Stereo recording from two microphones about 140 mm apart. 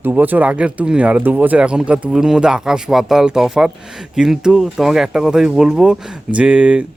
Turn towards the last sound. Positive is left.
turn(degrees=-10)  # may be behind; listen again after turning